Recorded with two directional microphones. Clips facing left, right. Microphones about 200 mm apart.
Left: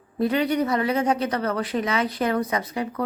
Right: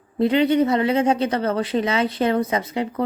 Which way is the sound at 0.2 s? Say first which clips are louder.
Right 5 dB; 25° right (ahead or behind).